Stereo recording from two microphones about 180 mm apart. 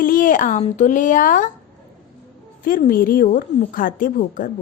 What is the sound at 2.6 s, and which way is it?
A woman's voice, 50° left (ahead or behind).